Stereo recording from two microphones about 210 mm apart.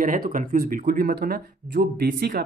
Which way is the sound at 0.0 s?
40° right (ahead or behind).